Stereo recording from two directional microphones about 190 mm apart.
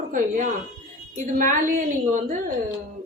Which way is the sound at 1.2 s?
40° right (ahead or behind).